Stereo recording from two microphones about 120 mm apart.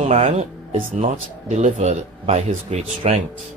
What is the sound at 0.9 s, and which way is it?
Speech, 80° right.